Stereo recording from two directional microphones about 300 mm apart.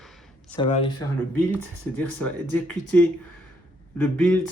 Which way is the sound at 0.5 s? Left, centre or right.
Centre.